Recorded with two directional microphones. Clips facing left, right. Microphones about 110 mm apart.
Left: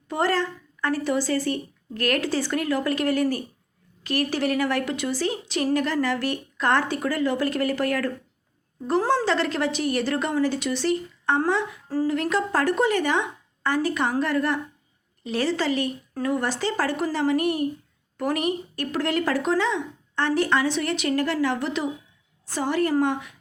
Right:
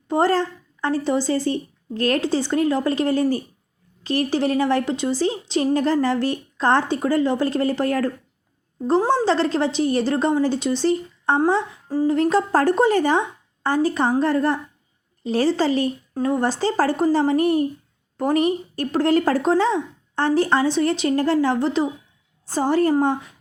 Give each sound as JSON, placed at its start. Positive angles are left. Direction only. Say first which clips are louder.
{"t": 0.1, "sound": "a woman's voice", "louder": "right 5 dB", "side_deg": -30}